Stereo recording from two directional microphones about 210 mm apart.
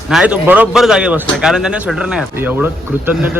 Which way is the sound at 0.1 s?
5° right (ahead or behind).